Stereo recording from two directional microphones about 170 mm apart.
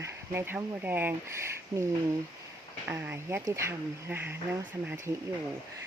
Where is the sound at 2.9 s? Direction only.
10° right (ahead or behind).